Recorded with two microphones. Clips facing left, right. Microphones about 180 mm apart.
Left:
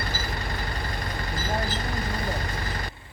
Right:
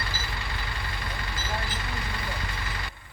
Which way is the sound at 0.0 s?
40° left (ahead or behind).